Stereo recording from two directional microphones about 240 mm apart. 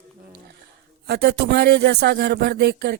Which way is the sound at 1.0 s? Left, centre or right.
Right.